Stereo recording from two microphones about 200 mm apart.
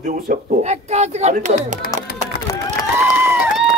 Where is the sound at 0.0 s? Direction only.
45° right (ahead or behind).